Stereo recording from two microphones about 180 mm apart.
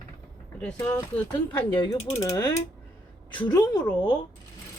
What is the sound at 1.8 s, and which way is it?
Mechanisms, 20° left (ahead or behind).